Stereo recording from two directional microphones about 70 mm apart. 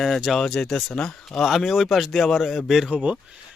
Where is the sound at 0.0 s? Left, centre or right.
Centre.